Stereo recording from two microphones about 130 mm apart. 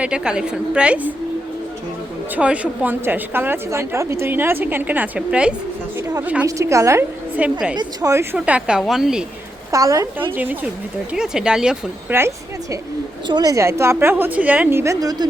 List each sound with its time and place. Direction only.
0.0 s a woman's voice: 10° right (ahead or behind)
2.3 s a woman's voice: 10° right (ahead or behind)
6.4 s a woman's voice: 25° right (ahead or behind)
7.4 s a woman's voice: 10° right (ahead or behind)
7.8 s a woman's voice: 25° right (ahead or behind)
8.4 s a woman's voice: 10° right (ahead or behind)
9.7 s a woman's voice: 25° right (ahead or behind)
10.3 s a woman's voice: 15° right (ahead or behind)
13.2 s a woman's voice: 30° right (ahead or behind)